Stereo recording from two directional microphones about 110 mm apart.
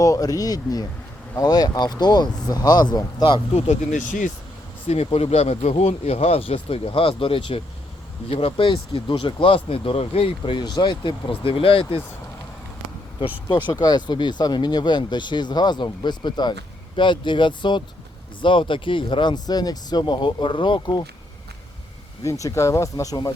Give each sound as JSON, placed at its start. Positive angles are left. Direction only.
{"t": 0.0, "sound": "speech", "side_deg": 30}
{"t": 4.9, "sound": "speech", "side_deg": 65}
{"t": 13.5, "sound": "speech", "side_deg": 40}
{"t": 22.2, "sound": "speech", "side_deg": 30}